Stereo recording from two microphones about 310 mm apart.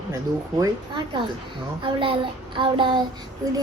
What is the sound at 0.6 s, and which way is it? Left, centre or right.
A child's voice, centre.